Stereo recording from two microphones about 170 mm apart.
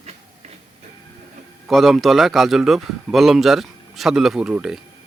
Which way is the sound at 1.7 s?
Centre (ahead or behind).